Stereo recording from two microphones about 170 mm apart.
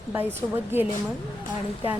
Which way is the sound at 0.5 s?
10° right (ahead or behind).